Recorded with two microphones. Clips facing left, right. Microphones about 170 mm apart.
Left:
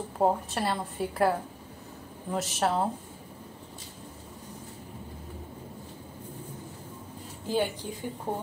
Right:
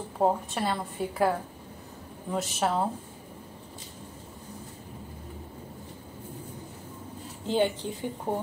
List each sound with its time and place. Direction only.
0.2 s a woman's voice: centre (ahead or behind)
2.3 s a woman's voice: centre (ahead or behind)
7.4 s a woman's voice: 20° right (ahead or behind)